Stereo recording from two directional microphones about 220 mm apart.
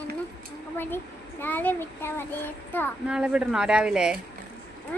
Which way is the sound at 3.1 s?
5° right (ahead or behind).